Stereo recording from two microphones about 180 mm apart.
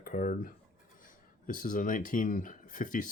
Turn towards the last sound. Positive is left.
turn(degrees=45)  # may be behind; listen again after turning